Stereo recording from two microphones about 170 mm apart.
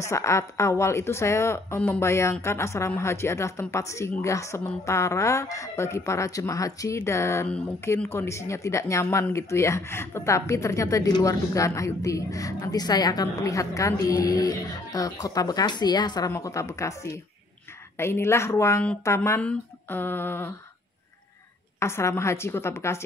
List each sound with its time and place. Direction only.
0.0 s a woman's voice: 15° left (ahead or behind)
21.7 s speech: 15° left (ahead or behind)